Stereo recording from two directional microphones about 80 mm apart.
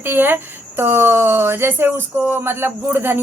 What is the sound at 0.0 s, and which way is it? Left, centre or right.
Speech, right.